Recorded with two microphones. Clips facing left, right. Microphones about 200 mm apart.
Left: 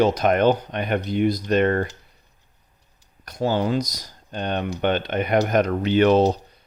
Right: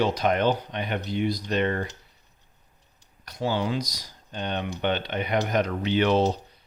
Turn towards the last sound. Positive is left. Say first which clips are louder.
# left 5 dB
turn(degrees=45)  # may be behind; listen again after turning